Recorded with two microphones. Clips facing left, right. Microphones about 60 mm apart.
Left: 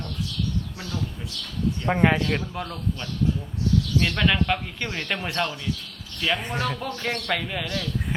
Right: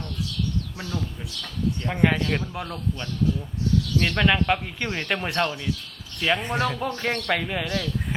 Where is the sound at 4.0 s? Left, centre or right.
Centre.